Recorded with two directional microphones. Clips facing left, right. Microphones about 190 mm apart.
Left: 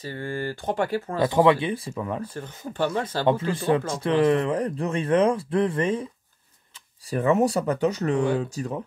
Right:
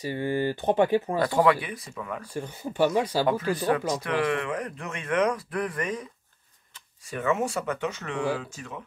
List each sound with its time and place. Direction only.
0.0 s speech: 15° right (ahead or behind)
1.2 s speech: 20° left (ahead or behind)
2.2 s speech: 10° right (ahead or behind)
3.3 s speech: 25° left (ahead or behind)
7.1 s speech: 35° left (ahead or behind)